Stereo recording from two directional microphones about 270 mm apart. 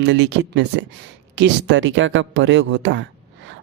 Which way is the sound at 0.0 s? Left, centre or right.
Right.